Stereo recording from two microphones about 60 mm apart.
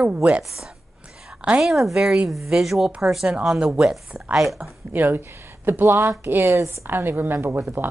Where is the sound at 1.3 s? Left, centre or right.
Centre.